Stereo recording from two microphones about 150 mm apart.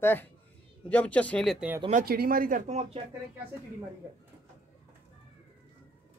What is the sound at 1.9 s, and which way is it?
Speech, 75° right (ahead or behind).